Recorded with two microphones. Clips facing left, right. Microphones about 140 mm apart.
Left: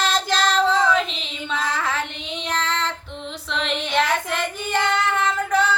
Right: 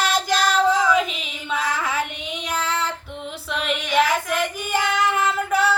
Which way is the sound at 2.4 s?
10° right (ahead or behind).